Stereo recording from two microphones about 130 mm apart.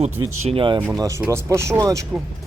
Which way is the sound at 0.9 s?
25° right (ahead or behind).